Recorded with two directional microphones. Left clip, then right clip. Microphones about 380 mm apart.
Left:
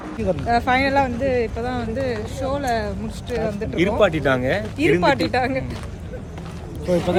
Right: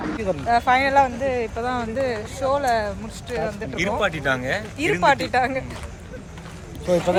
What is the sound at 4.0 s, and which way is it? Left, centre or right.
Speech, centre.